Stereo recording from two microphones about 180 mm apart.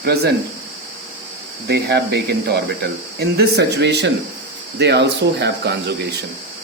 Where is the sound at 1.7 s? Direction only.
65° right (ahead or behind).